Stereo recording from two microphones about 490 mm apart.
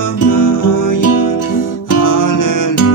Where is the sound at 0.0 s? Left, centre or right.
Left.